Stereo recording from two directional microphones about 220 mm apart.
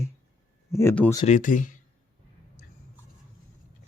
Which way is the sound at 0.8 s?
10° left (ahead or behind).